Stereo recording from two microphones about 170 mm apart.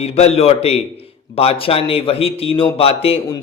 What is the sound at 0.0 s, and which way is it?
A woman's voice, 40° left (ahead or behind).